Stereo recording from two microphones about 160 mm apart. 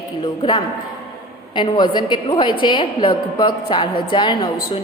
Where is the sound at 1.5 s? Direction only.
30° left (ahead or behind).